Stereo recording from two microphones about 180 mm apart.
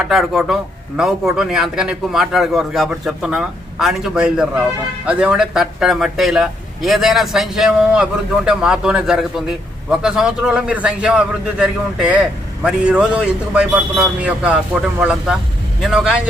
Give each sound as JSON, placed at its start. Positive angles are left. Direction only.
{"t": 0.0, "sound": "a man's voice", "side_deg": 0}